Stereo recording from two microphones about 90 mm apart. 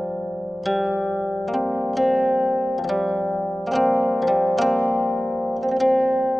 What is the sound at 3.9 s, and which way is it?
Zither, 15° right (ahead or behind).